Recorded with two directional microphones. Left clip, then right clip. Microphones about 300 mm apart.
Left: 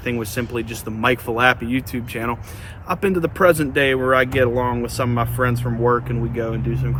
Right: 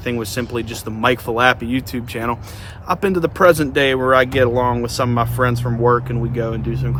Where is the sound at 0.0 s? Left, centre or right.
Centre.